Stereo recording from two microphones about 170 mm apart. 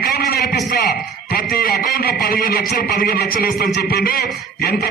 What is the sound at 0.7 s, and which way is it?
Speech, 60° left (ahead or behind).